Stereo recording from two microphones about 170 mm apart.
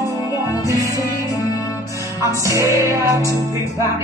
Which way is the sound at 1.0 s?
20° left (ahead or behind).